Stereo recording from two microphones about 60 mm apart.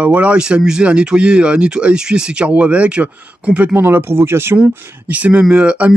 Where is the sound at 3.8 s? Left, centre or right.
Right.